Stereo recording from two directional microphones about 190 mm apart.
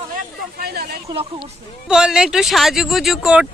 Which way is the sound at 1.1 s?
25° right (ahead or behind).